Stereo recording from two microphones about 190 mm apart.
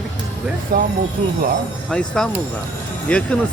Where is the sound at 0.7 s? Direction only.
50° right (ahead or behind).